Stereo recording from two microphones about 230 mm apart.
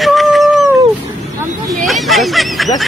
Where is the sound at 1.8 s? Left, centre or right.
Centre.